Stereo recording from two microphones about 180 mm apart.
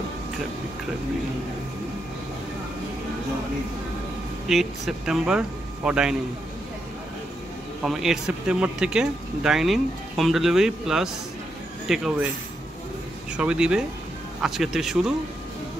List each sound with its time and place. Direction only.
4.5 s speech: centre (ahead or behind)
7.8 s speech: centre (ahead or behind)
13.4 s speech: 5° right (ahead or behind)